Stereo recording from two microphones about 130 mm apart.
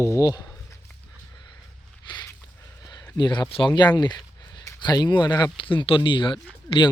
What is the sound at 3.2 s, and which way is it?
Speech, 35° left (ahead or behind).